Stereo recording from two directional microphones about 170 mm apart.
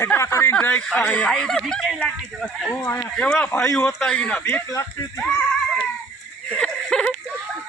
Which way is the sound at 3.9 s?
5° left (ahead or behind).